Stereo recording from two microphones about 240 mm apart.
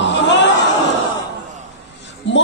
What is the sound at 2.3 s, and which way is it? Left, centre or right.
Music, left.